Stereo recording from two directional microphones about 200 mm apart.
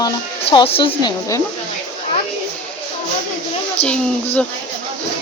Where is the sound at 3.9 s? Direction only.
5° left (ahead or behind).